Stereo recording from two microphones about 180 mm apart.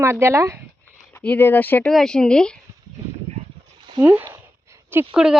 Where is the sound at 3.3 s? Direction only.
35° right (ahead or behind).